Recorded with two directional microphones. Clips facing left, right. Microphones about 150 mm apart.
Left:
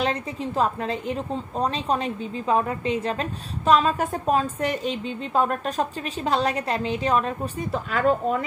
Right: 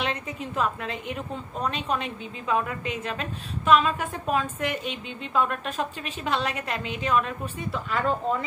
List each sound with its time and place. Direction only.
0.0 s a woman's voice: 35° left (ahead or behind)